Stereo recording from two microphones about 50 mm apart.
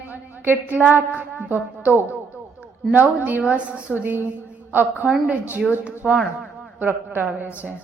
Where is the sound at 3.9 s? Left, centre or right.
Right.